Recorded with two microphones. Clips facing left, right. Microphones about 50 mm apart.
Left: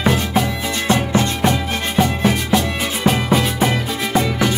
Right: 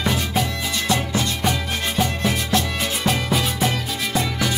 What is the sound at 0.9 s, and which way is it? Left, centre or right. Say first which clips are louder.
Music: left 6 dB; left.